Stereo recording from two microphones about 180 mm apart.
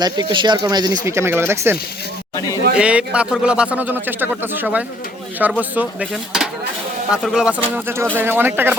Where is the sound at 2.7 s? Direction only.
5° right (ahead or behind).